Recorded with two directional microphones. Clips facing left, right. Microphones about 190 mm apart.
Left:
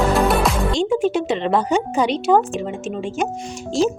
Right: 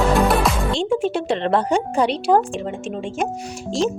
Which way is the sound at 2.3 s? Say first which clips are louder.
Left 1 dB; centre (ahead or behind).